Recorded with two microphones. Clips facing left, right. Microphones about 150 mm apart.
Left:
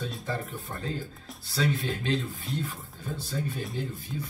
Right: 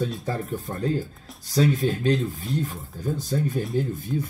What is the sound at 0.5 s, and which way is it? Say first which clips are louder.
Speech: right 9 dB; 45° right (ahead or behind).